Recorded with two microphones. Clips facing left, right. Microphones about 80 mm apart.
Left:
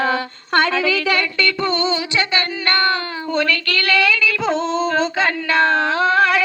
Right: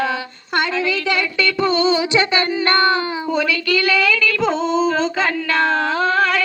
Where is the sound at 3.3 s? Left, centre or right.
Centre.